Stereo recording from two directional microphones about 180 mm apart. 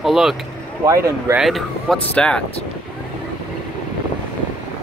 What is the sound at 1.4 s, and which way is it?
Speech, centre (ahead or behind).